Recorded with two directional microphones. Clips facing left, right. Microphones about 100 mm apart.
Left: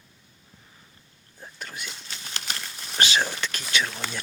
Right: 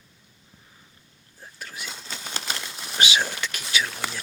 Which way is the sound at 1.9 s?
35° right (ahead or behind).